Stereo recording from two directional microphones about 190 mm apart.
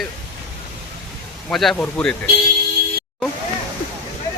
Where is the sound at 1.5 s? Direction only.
Centre (ahead or behind).